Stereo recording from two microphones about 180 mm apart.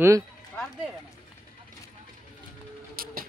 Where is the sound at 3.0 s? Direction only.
55° right (ahead or behind).